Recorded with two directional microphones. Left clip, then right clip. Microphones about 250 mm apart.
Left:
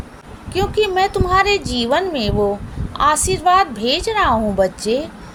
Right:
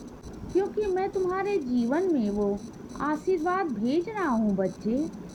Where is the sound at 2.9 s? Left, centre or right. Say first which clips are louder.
Left 12 dB; right.